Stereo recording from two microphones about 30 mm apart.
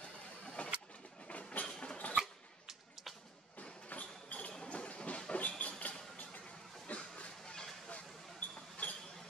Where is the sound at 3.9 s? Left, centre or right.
Left.